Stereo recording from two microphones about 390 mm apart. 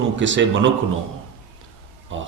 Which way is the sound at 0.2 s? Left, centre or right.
Right.